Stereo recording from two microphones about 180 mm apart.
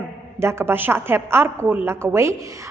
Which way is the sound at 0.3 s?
15° right (ahead or behind).